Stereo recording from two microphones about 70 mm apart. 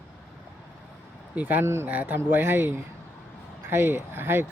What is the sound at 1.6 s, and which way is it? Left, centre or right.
Speech, right.